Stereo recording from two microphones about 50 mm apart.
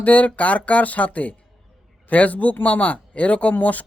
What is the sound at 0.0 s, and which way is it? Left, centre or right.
Speech, left.